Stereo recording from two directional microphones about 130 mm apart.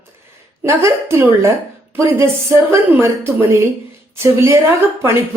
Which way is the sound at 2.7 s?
20° right (ahead or behind).